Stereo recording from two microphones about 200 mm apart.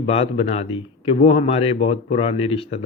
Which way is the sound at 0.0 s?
30° left (ahead or behind).